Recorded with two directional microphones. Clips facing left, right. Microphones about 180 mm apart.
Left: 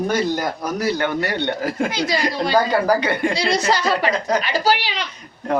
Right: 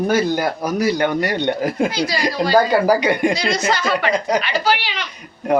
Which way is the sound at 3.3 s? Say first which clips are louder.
Left 1 dB; 30° left (ahead or behind).